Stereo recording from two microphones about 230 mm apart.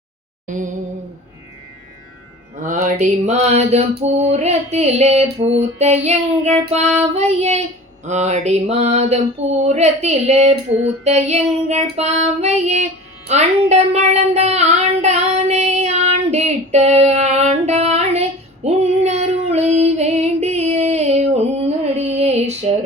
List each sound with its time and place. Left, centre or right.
0.4 s a sound: right
2.6 s mantra: right
11.0 s child singing: right